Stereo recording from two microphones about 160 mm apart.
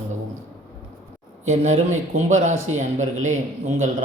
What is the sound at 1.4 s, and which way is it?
A man's voice, 45° right (ahead or behind).